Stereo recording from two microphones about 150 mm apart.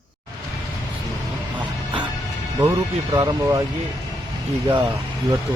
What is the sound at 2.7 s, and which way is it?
Speech, 25° right (ahead or behind).